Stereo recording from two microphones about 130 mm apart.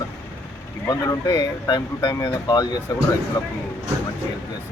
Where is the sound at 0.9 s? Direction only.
30° left (ahead or behind).